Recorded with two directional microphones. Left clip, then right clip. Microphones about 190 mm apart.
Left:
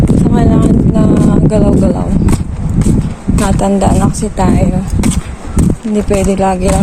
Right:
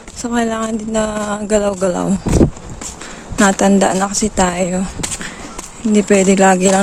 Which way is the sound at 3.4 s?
40° right (ahead or behind).